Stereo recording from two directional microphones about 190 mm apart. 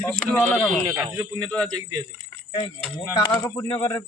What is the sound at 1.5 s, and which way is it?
Speech, 5° left (ahead or behind).